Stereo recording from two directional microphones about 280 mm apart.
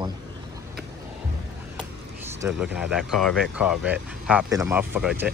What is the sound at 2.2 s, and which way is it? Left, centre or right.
Speech, centre.